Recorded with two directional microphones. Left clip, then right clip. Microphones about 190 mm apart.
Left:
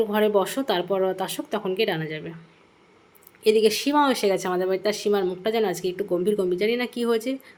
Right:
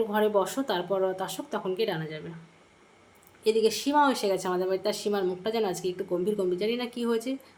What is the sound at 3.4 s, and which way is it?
A woman's voice, 20° left (ahead or behind).